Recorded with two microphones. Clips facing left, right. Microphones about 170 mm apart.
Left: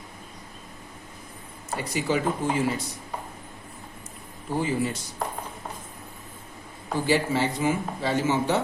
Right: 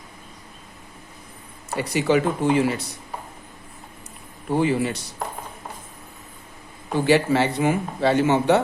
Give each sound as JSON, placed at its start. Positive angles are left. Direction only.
{"t": 1.7, "sound": "speech", "side_deg": -70}
{"t": 4.5, "sound": "speech", "side_deg": -70}
{"t": 7.0, "sound": "a man's voice", "side_deg": -70}